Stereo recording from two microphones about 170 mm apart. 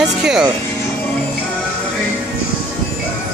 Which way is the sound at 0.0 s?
5° right (ahead or behind).